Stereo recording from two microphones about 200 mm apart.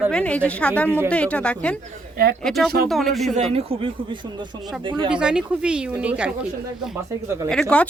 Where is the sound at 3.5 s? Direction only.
25° right (ahead or behind).